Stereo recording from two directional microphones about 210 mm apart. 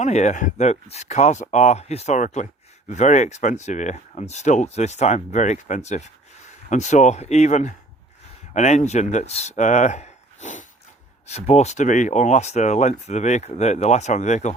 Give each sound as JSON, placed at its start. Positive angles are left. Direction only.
{"t": 0.0, "sound": "speech", "side_deg": 35}